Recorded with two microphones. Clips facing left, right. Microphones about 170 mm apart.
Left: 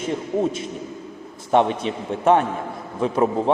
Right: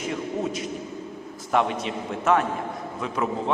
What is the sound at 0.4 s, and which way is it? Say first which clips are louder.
A man's voice: left 4 dB; 25° left (ahead or behind).